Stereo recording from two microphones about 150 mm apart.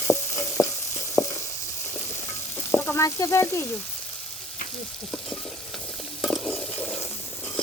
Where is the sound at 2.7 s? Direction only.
15° left (ahead or behind).